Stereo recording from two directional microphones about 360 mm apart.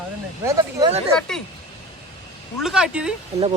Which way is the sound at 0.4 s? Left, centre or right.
Centre.